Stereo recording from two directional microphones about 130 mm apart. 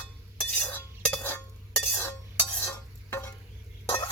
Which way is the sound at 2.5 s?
20° left (ahead or behind).